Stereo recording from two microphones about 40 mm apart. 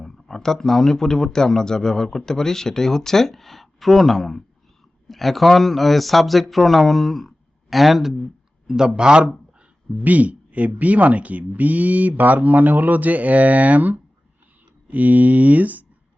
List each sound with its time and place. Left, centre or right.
0.0 s speech: centre; by 9.3 s right
10.0 s speech: right